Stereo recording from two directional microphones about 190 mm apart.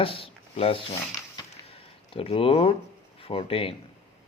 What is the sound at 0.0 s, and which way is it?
Ratchet, 30° left (ahead or behind).